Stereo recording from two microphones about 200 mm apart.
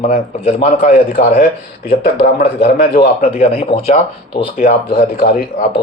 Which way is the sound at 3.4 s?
30° left (ahead or behind).